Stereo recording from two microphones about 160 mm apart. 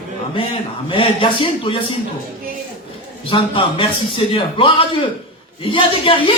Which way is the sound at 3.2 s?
35° left (ahead or behind).